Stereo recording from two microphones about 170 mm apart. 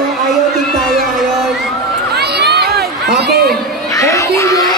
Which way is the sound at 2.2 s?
75° right (ahead or behind).